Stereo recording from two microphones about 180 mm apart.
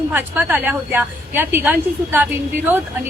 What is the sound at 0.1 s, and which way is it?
A woman's voice, 10° right (ahead or behind).